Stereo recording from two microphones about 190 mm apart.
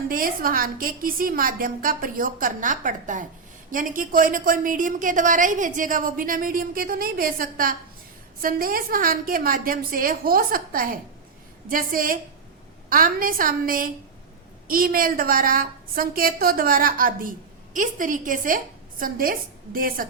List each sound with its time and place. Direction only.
0.1 s a woman's voice: 50° right (ahead or behind)